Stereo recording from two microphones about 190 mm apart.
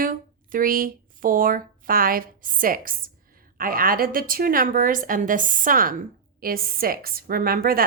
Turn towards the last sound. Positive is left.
turn(degrees=-50)  # may be behind; listen again after turning